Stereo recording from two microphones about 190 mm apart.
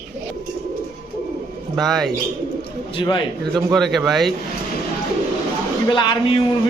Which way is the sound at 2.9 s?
25° left (ahead or behind).